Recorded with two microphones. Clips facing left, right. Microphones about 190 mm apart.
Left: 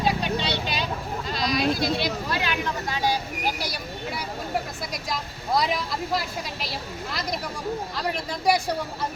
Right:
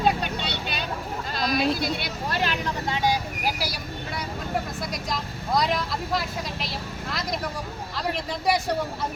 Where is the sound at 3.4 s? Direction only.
5° right (ahead or behind).